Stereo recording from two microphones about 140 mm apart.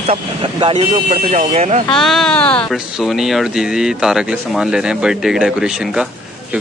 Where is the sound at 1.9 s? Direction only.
Centre (ahead or behind).